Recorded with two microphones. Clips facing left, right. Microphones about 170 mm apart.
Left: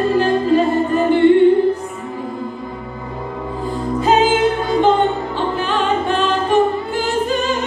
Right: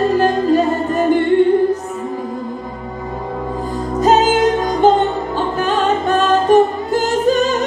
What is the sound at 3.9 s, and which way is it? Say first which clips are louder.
Music: right 2 dB; 40° right (ahead or behind).